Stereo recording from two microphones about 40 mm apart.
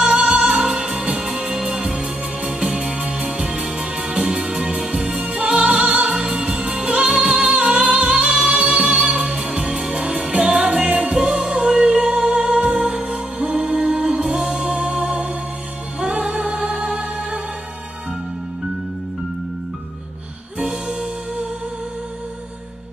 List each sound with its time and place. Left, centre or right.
0.0 s music: centre
5.0 s music: right
11.1 s music: centre; by 12.8 s right
12.8 s music: centre